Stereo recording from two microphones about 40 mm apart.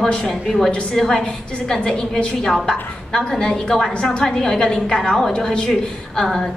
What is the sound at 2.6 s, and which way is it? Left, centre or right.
A woman's voice, centre.